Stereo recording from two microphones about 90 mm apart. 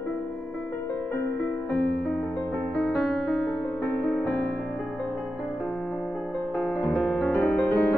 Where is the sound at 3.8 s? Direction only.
15° left (ahead or behind).